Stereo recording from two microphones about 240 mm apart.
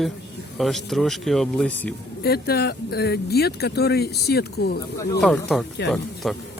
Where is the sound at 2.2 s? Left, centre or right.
Left.